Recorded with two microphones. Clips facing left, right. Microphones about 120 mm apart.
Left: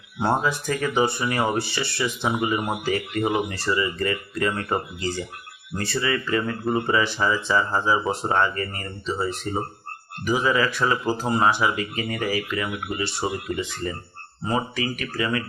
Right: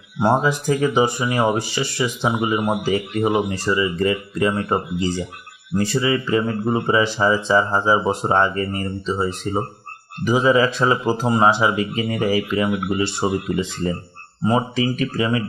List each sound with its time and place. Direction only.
0.2 s speech: 15° right (ahead or behind)